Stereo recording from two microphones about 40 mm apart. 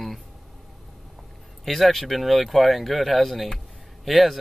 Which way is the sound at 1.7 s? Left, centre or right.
Centre.